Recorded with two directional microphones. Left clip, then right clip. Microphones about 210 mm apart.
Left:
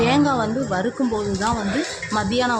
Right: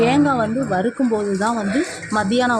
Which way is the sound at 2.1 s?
20° right (ahead or behind).